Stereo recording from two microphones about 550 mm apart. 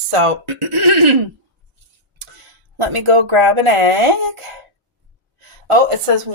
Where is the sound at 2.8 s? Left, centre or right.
Right.